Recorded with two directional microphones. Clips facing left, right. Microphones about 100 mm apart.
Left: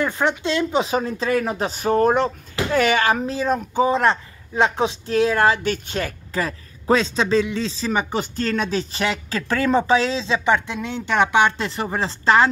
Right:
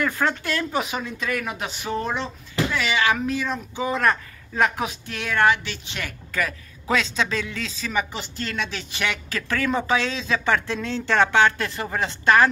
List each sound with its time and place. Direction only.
0.0 s speech: 20° left (ahead or behind)
0.8 s speech: 35° left (ahead or behind)
3.9 s speech: 25° left (ahead or behind)
5.6 s a woman's voice: 45° left (ahead or behind); by 12.4 s 25° left (ahead or behind)